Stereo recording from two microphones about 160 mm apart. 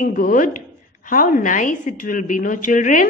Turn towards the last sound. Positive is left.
turn(degrees=55)  # may be behind; listen again after turning